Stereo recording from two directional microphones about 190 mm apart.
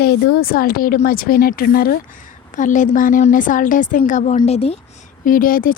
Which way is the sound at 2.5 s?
40° left (ahead or behind).